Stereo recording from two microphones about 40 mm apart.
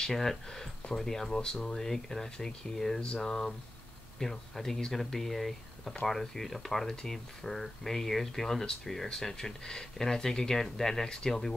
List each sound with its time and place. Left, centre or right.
0.0 s speech: centre